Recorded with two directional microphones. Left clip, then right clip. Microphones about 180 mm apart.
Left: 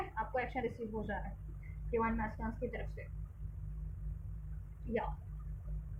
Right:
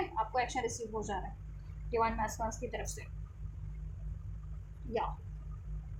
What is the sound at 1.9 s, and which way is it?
A woman's voice, 30° right (ahead or behind).